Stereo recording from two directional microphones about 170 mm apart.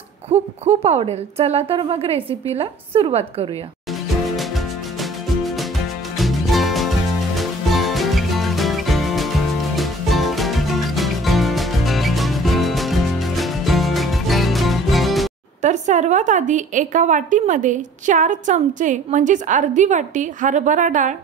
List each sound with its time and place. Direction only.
0.3 s a woman's voice: 35° right (ahead or behind)
6.1 s music: centre (ahead or behind)
15.6 s a woman's voice: 45° right (ahead or behind)